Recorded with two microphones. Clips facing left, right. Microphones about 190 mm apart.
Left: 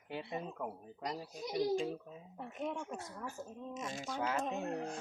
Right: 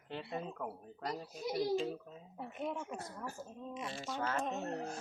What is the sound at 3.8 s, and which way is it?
Speech, 45° left (ahead or behind).